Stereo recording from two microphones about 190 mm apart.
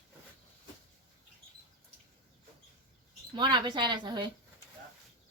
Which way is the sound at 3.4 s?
25° right (ahead or behind).